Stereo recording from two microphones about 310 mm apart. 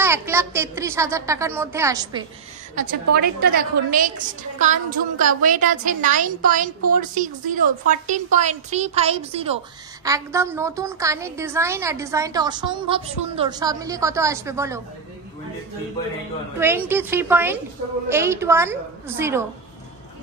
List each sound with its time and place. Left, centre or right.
0.0 s a woman's voice: centre
2.7 s a woman's voice: right; by 14.8 s centre
16.5 s a woman's voice: centre